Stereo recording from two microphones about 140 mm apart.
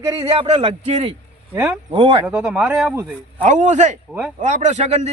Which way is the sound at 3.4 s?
60° right (ahead or behind).